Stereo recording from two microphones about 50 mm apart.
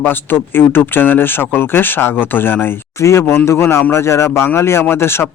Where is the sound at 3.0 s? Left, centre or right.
Left.